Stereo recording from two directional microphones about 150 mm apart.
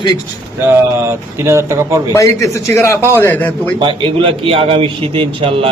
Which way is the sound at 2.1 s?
20° left (ahead or behind).